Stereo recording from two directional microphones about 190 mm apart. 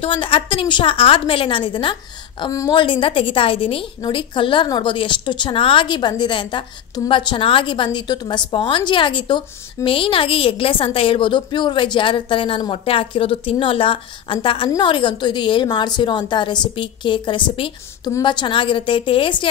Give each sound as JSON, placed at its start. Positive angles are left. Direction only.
{"t": 0.0, "sound": "a woman's voice", "side_deg": 30}